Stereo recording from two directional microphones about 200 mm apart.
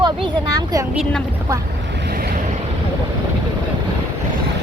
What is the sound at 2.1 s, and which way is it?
Waves, 50° right (ahead or behind).